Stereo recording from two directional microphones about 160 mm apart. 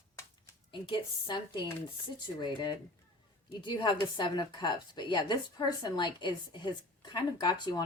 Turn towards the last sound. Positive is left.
turn(degrees=25)  # may be behind; listen again after turning